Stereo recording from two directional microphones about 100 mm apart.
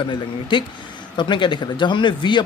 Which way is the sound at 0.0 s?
55° left (ahead or behind).